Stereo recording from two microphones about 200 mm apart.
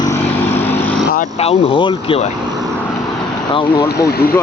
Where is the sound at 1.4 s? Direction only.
30° left (ahead or behind).